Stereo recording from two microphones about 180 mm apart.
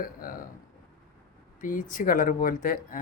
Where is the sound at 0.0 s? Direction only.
50° left (ahead or behind).